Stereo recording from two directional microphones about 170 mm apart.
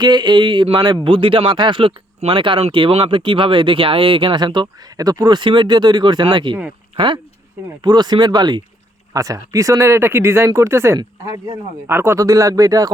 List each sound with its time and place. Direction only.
0.0 s speech: 25° right (ahead or behind)